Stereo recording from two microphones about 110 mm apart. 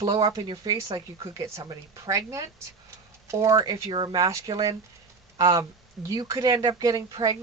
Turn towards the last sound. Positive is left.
turn(degrees=-35)  # may be behind; listen again after turning